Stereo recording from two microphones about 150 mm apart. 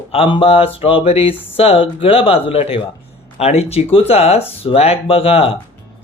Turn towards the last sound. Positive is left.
turn(degrees=40)  # may be behind; listen again after turning